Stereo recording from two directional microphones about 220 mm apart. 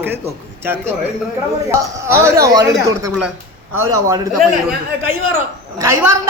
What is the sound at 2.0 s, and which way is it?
Speech, 10° right (ahead or behind).